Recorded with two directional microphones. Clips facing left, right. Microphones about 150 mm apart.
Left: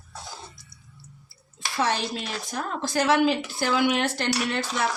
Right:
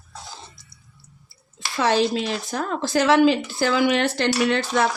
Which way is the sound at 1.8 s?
90° right.